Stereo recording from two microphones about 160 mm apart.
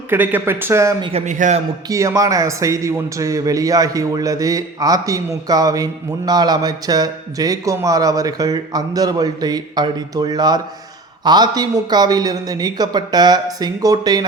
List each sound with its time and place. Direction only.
0.1 s speech: 10° right (ahead or behind)
1.0 s a man's voice: 45° right (ahead or behind)
1.9 s a man's voice: 20° right (ahead or behind)